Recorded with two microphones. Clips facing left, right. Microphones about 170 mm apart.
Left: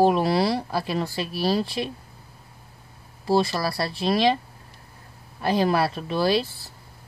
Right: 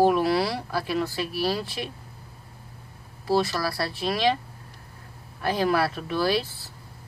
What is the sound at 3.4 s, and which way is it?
Speech, 25° left (ahead or behind).